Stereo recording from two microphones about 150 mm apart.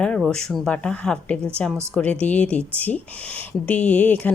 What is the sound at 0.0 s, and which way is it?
A woman's voice, 5° left (ahead or behind).